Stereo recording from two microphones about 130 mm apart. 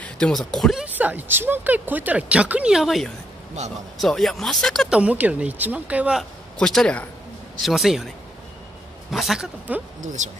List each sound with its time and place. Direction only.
0.0 s speech: 5° left (ahead or behind)
0.8 s speech: 15° right (ahead or behind); by 4.8 s 5° left (ahead or behind)
4.8 s speech: 10° right (ahead or behind)
6.6 s speech: 5° left (ahead or behind)
9.1 s speech: centre (ahead or behind)
10.0 s speech: 65° right (ahead or behind)